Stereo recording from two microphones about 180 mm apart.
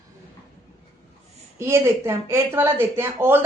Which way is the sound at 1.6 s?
15° right (ahead or behind).